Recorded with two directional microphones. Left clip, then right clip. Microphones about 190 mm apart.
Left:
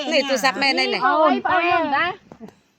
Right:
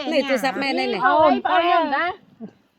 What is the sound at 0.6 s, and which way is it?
Speech, 50° right (ahead or behind).